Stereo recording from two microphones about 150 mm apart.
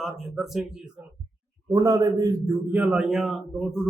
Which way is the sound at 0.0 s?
Centre (ahead or behind).